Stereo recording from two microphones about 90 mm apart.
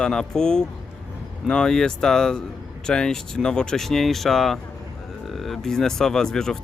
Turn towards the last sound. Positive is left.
turn(degrees=5)  # may be behind; listen again after turning